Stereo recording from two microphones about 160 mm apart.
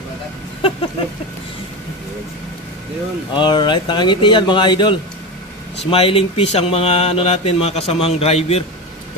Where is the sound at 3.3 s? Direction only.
30° left (ahead or behind).